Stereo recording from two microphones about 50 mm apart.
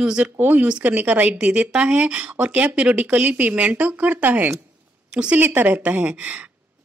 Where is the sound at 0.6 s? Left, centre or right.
Right.